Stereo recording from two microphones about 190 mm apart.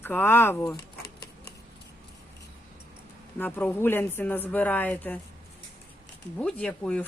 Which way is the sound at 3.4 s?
10° left (ahead or behind).